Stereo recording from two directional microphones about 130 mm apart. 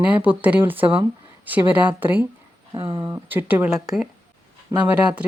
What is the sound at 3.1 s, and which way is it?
Speech, 15° right (ahead or behind).